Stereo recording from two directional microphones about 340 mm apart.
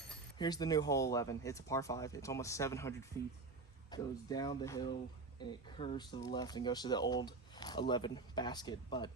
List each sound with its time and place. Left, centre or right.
0.3 s speech: centre